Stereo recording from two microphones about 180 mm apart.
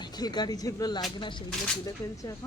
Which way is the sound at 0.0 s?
25° left (ahead or behind).